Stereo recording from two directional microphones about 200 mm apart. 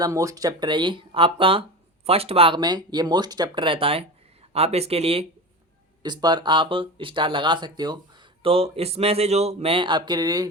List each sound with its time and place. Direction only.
0.0 s speech: 15° right (ahead or behind)